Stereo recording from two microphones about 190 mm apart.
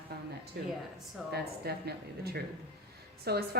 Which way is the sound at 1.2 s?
Centre (ahead or behind).